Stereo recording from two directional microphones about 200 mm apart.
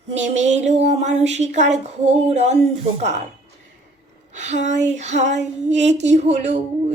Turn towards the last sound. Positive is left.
turn(degrees=-35)  # may be behind; listen again after turning